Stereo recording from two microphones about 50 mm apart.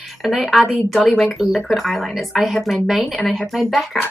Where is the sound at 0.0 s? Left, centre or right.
Centre.